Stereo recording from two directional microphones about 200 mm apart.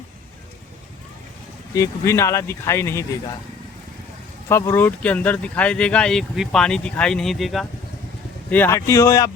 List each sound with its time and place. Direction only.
1.7 s speech: 15° left (ahead or behind)
4.4 s speech: 15° left (ahead or behind)